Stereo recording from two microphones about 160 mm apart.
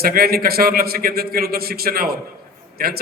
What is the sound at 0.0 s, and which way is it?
A man's voice, 70° right (ahead or behind).